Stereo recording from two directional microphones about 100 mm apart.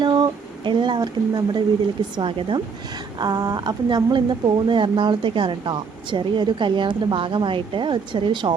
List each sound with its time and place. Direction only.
0.0 s speech: 50° right (ahead or behind)
2.1 s speech: 55° right (ahead or behind)
3.2 s speech: 40° right (ahead or behind)